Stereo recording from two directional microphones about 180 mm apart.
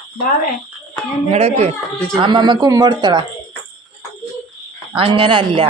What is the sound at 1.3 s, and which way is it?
Speech, 35° right (ahead or behind).